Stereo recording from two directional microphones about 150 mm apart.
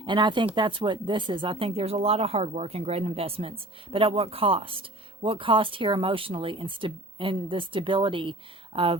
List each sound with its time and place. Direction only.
0.0 s speech: 30° right (ahead or behind)